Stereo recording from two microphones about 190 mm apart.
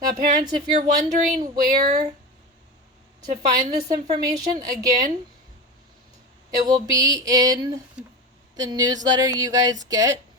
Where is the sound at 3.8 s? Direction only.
20° right (ahead or behind).